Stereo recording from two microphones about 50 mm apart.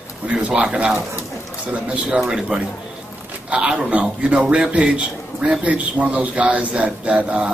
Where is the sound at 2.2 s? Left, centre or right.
Centre.